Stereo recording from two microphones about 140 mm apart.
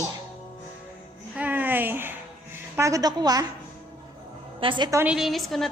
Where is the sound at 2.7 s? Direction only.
25° right (ahead or behind).